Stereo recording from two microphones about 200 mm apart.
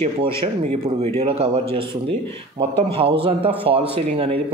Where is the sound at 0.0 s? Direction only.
30° right (ahead or behind).